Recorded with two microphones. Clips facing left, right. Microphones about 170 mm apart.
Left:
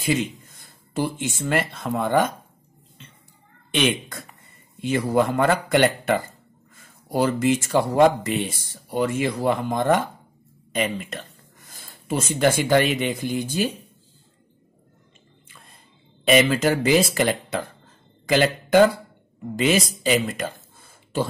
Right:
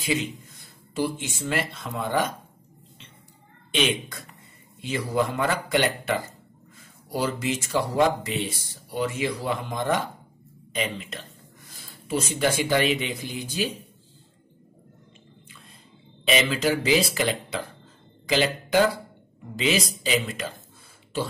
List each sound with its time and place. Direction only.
0.0 s speech: 50° left (ahead or behind)
3.7 s a woman's voice: 55° left (ahead or behind)
16.3 s speech: 50° left (ahead or behind)